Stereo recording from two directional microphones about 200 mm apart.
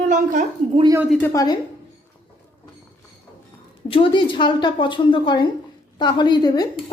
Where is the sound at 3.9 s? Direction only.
25° left (ahead or behind).